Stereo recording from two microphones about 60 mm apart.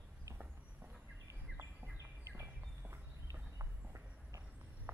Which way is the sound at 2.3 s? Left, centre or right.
Right.